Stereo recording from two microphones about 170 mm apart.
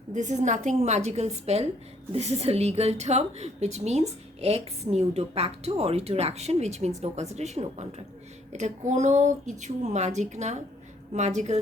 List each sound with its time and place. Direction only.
0.1 s a woman's voice: 45° right (ahead or behind)